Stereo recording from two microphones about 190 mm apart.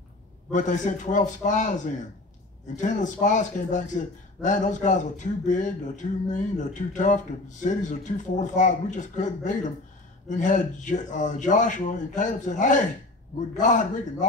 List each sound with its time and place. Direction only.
0.5 s speech: 40° left (ahead or behind)